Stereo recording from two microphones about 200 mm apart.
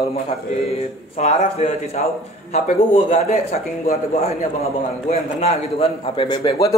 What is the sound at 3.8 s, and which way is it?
Speech, 45° left (ahead or behind).